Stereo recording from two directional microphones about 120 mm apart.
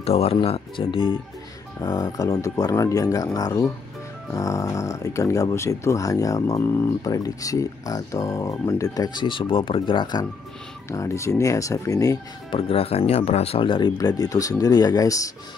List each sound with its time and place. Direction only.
0.0 s speech: 60° left (ahead or behind)
1.8 s speech: 30° left (ahead or behind)
10.9 s speech: 25° left (ahead or behind)
12.4 s speech: 50° left (ahead or behind)
13.9 s speech: 30° left (ahead or behind)